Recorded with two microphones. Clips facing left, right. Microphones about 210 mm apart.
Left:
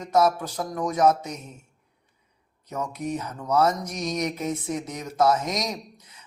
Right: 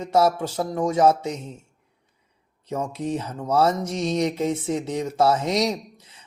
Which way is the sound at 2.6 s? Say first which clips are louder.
Right 3 dB; 25° right (ahead or behind).